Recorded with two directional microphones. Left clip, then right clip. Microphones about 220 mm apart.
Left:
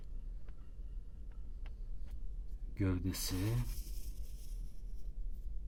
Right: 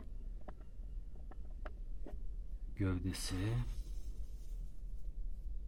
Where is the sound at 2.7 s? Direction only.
5° left (ahead or behind).